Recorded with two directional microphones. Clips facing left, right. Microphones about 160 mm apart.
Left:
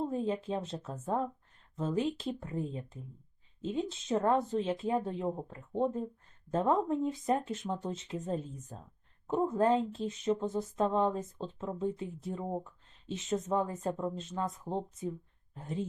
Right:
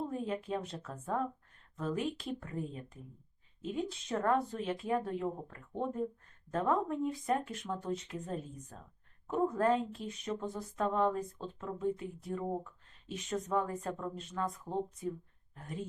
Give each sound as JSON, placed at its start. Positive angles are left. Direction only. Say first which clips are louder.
{"t": 0.0, "sound": "a woman's voice", "louder": "left 4 dB", "side_deg": 25}